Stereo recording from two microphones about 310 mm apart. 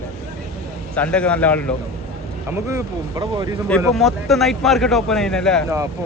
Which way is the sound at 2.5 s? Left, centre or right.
Centre.